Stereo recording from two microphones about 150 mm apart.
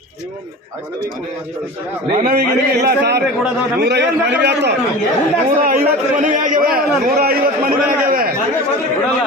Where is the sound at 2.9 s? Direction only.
90° right.